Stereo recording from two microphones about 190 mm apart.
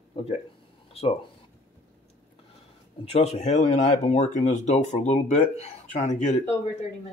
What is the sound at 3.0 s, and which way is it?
Speech, 35° left (ahead or behind).